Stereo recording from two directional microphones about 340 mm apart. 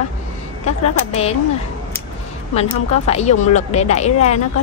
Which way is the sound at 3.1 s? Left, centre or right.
Centre.